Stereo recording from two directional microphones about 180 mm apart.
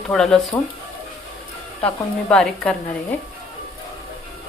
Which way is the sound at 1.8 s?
5° left (ahead or behind).